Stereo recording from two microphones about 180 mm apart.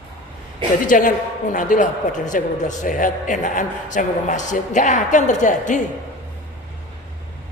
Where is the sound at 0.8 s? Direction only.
50° left (ahead or behind).